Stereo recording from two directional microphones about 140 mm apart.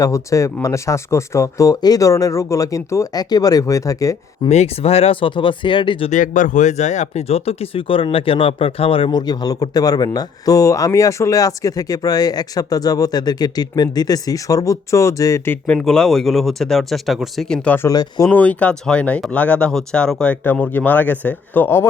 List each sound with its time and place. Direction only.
0.0 s speech: 20° left (ahead or behind)
4.4 s speech: 50° left (ahead or behind)
6.1 s speech: 65° left (ahead or behind); by 15.5 s 25° left (ahead or behind)
15.6 s speech: 5° left (ahead or behind)
17.8 s speech: 25° left (ahead or behind)
18.3 s speech: 10° left (ahead or behind)